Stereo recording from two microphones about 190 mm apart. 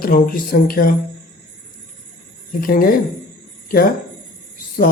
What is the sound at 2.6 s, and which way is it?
Speech, 50° left (ahead or behind).